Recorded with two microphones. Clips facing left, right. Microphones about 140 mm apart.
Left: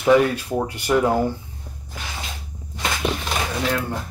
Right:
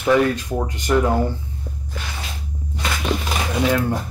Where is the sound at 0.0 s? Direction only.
10° left (ahead or behind).